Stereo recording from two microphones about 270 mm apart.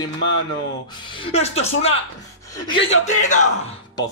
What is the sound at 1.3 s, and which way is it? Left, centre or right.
Speech, left.